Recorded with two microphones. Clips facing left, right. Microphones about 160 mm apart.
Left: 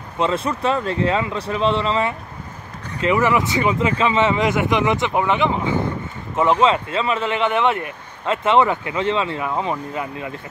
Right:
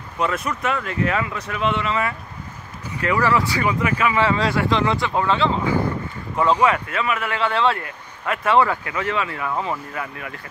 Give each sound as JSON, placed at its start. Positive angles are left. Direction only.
{"t": 0.2, "sound": "speech", "side_deg": 30}